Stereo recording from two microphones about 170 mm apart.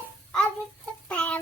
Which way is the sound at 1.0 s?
5° left (ahead or behind).